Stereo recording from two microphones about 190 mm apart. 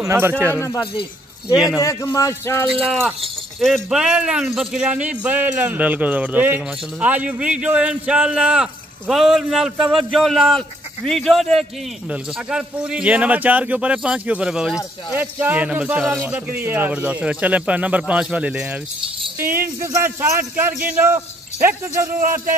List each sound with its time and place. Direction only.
0.0 s speech: 15° right (ahead or behind)
1.8 s speech: 15° left (ahead or behind)
2.8 s a man's voice: centre (ahead or behind)